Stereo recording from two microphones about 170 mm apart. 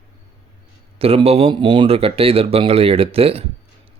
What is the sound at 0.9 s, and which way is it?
Mantra, 35° right (ahead or behind).